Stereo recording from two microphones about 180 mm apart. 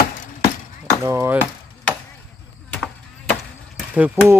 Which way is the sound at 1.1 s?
15° right (ahead or behind).